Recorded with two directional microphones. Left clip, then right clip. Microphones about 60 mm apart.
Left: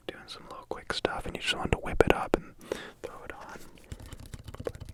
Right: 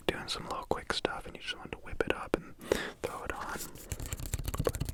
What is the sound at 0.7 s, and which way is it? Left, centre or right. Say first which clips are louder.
Speech: left 4 dB; centre.